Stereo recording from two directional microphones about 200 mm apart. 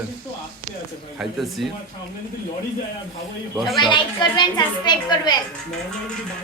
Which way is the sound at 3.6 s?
Centre (ahead or behind).